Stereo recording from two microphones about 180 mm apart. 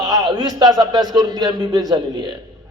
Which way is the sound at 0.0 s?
20° right (ahead or behind).